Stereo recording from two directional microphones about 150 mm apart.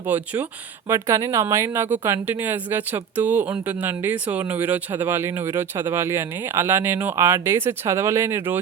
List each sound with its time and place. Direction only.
0.0 s speech: 10° right (ahead or behind)